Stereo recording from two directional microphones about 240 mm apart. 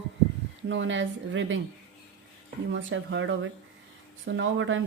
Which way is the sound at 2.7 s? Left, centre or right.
Right.